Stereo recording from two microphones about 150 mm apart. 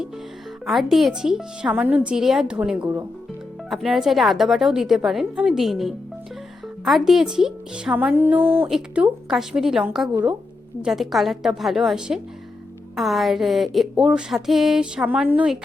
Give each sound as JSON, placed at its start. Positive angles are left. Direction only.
{"t": 0.6, "sound": "speech", "side_deg": 0}
{"t": 8.4, "sound": "speech", "side_deg": -40}
{"t": 8.6, "sound": "speech", "side_deg": -5}